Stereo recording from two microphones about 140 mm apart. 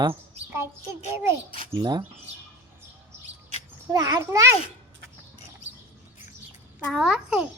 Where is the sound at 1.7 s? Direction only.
30° right (ahead or behind).